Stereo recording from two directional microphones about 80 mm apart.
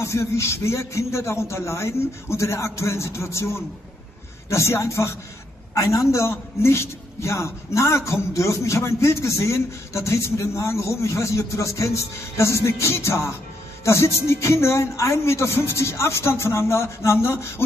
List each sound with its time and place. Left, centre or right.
0.0 s a man's voice: left